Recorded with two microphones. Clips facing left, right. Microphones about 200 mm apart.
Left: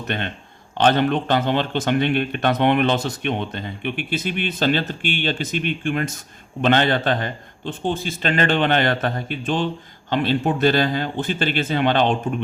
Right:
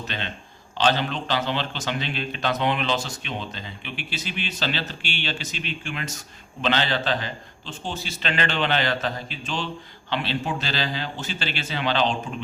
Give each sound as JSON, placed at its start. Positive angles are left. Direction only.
{"t": 0.1, "sound": "speech", "side_deg": 55}